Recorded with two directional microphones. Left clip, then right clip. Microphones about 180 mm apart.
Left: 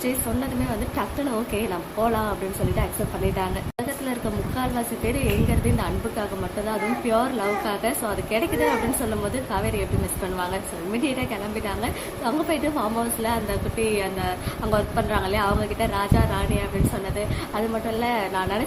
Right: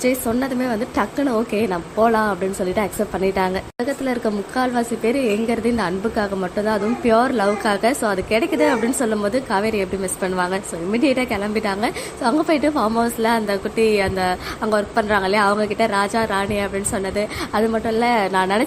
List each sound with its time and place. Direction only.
0.7 s speech: 30° right (ahead or behind)
4.5 s a woman's voice: 30° right (ahead or behind)